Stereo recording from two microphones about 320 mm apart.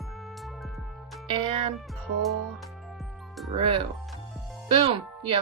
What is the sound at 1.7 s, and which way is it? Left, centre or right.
Music, centre.